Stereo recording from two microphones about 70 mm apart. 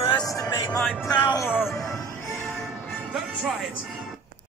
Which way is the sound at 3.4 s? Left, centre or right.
Centre.